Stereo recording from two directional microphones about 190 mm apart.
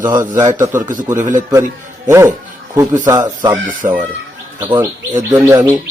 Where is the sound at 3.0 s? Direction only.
20° right (ahead or behind).